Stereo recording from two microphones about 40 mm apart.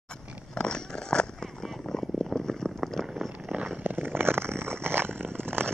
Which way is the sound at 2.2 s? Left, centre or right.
Centre.